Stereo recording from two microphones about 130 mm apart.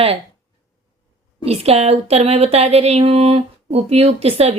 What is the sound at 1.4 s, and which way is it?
Speech, 50° right (ahead or behind).